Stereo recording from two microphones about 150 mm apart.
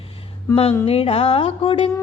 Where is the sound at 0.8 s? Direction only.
40° left (ahead or behind).